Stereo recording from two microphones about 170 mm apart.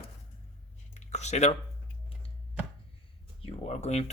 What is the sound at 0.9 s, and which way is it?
Speech, 40° left (ahead or behind).